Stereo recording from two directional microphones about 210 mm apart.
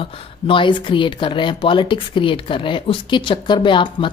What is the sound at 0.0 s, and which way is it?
Speech, 25° left (ahead or behind).